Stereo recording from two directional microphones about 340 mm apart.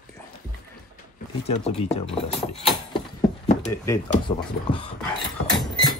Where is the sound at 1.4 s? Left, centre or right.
Centre.